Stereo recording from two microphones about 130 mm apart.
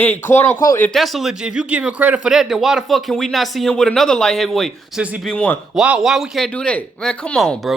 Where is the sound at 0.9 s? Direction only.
Centre (ahead or behind).